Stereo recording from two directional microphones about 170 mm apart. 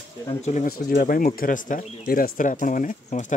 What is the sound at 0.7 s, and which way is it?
Speech, 55° left (ahead or behind).